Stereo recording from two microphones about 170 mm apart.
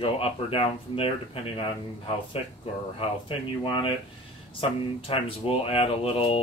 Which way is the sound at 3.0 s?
30° left (ahead or behind).